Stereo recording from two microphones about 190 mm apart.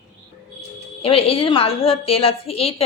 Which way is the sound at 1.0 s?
30° left (ahead or behind).